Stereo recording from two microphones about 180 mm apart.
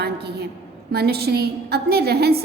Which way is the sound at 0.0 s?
60° right (ahead or behind).